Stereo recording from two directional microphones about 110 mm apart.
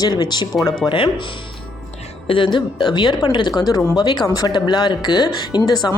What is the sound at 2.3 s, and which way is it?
Speech, 50° left (ahead or behind).